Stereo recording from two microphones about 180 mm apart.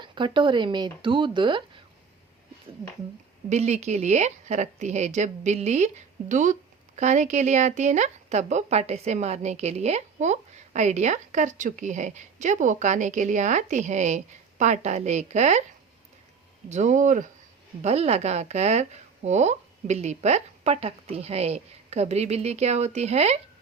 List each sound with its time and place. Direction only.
0.0 s speech: 25° right (ahead or behind)
3.5 s a woman's voice: 40° right (ahead or behind)
16.6 s a woman's voice: 40° right (ahead or behind)